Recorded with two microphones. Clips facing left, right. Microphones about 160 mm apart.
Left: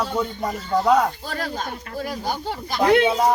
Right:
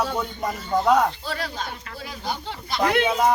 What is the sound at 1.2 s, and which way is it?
Speech, 45° left (ahead or behind).